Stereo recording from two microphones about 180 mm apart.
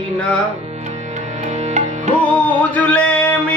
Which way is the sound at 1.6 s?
40° right (ahead or behind).